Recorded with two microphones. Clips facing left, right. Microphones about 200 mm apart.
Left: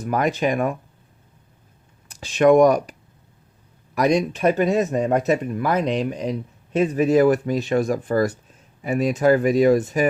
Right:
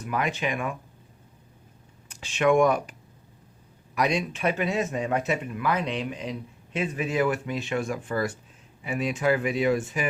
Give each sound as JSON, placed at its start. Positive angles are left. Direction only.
{"t": 0.0, "sound": "speech", "side_deg": 40}
{"t": 2.0, "sound": "speech", "side_deg": 40}
{"t": 3.9, "sound": "speech", "side_deg": 40}